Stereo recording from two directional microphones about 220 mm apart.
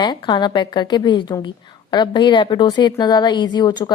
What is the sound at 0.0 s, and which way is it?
A woman's voice, 20° left (ahead or behind).